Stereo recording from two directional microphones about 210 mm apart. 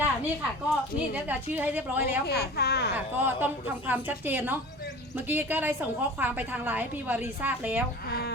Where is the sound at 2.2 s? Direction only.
50° left (ahead or behind).